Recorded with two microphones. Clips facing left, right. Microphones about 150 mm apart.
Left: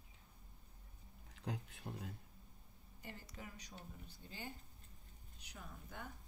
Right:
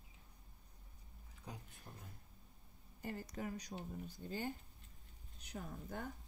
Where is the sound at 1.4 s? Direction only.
90° left.